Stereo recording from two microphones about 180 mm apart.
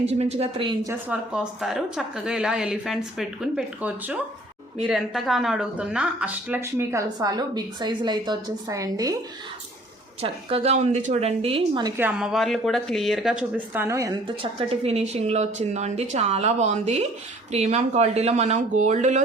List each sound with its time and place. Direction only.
0.0 s speech: 35° right (ahead or behind)
0.9 s a woman's voice: 10° right (ahead or behind)
10.2 s speech: 35° right (ahead or behind)
11.8 s a woman's voice: 20° right (ahead or behind)
12.0 s a woman's voice: centre (ahead or behind)
13.8 s speech: 15° right (ahead or behind)
14.3 s speech: 30° right (ahead or behind)